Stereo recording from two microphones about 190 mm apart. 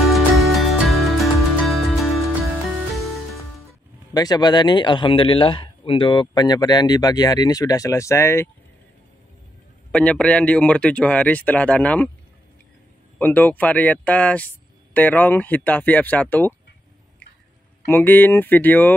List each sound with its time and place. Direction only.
0.1 s music: centre (ahead or behind)
4.1 s speech: 20° left (ahead or behind)
9.8 s speech: 5° left (ahead or behind)
13.2 s speech: 10° left (ahead or behind)
17.8 s speech: 10° left (ahead or behind)